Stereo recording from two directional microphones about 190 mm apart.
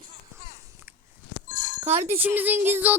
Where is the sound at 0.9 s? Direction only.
15° right (ahead or behind).